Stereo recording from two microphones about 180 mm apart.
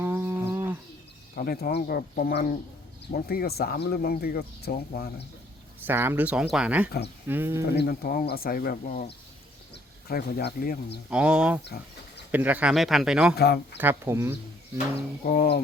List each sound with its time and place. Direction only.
0.0 s livestock: 10° right (ahead or behind)
1.4 s speech: 55° left (ahead or behind)
5.8 s speech: 10° right (ahead or behind)
7.7 s speech: 60° left (ahead or behind)
11.1 s speech: 5° right (ahead or behind)
11.6 s a sound: 70° left (ahead or behind)
12.3 s speech: 10° right (ahead or behind)
13.3 s speech: 60° left (ahead or behind)
13.7 s speech: 15° right (ahead or behind)
15.2 s speech: 55° left (ahead or behind)